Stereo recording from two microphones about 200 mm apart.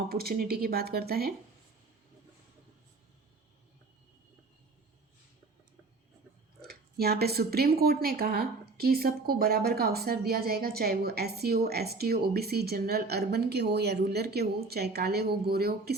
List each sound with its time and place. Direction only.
0.1 s speech: 50° right (ahead or behind)
6.6 s speech: 50° right (ahead or behind)